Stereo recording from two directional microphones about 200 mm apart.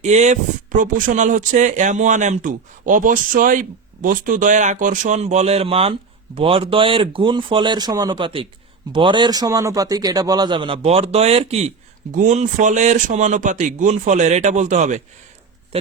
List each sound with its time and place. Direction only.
0.0 s a man's voice: 35° right (ahead or behind)